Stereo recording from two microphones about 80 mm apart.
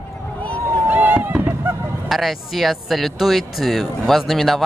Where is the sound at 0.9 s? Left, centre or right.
Right.